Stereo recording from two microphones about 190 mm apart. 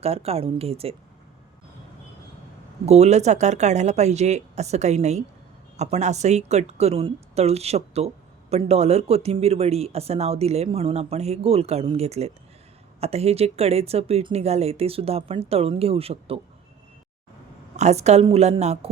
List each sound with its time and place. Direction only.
0.0 s speech: 30° right (ahead or behind)
2.8 s speech: 35° right (ahead or behind)
17.7 s speech: 35° right (ahead or behind)